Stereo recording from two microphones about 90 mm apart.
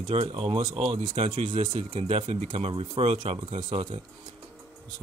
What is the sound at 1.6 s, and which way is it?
Speech, 90° right.